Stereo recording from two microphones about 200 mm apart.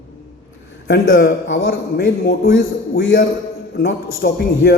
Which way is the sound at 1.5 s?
55° left (ahead or behind).